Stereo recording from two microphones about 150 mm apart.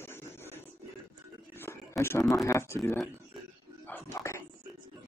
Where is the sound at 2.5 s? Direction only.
20° left (ahead or behind).